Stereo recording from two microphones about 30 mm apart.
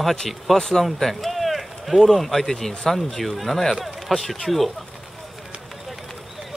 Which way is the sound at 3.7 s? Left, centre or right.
Centre.